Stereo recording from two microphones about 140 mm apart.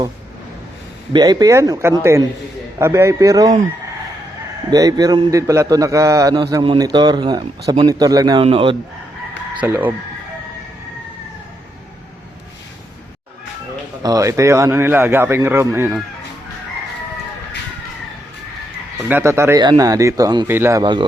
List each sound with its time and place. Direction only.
1.1 s a man's voice: 30° right (ahead or behind)
4.7 s a man's voice: 25° right (ahead or behind)
8.4 s speech: 40° right (ahead or behind)
9.6 s speech: 10° right (ahead or behind)
14.0 s a man's voice: 25° right (ahead or behind)
19.0 s a man's voice: 15° right (ahead or behind)
20.5 s speech: 15° right (ahead or behind)